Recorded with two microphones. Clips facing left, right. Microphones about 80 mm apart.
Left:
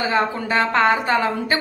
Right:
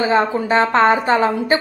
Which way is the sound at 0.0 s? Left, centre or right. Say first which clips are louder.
Right 4 dB; right.